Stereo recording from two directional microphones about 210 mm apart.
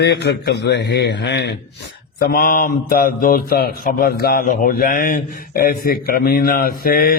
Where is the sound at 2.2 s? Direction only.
40° left (ahead or behind).